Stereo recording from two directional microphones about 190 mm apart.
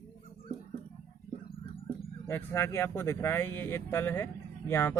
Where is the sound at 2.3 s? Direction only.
10° left (ahead or behind).